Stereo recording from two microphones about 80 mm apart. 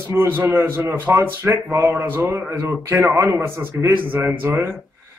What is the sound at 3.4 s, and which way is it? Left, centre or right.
Speech, right.